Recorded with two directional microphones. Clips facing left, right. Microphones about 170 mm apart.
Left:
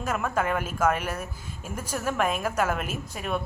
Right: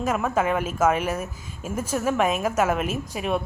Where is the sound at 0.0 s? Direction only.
10° right (ahead or behind).